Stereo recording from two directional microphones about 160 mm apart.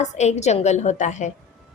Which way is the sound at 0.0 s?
45° left (ahead or behind).